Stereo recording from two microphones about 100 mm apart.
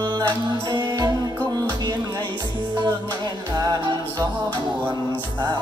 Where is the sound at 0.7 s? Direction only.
45° right (ahead or behind).